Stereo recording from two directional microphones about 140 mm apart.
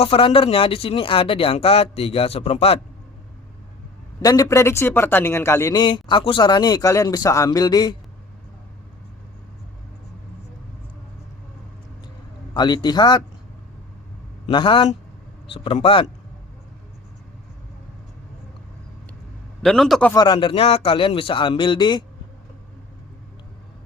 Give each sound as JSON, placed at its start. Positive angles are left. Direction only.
{"t": 0.0, "sound": "speech", "side_deg": 40}
{"t": 4.2, "sound": "a man's voice", "side_deg": 25}
{"t": 5.7, "sound": "speech", "side_deg": 35}
{"t": 12.5, "sound": "speech", "side_deg": 30}
{"t": 14.4, "sound": "a man's voice", "side_deg": 35}
{"t": 19.6, "sound": "speech", "side_deg": 0}
{"t": 20.1, "sound": "speech", "side_deg": 35}